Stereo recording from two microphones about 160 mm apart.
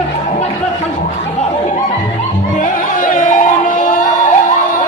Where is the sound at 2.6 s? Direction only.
55° left (ahead or behind).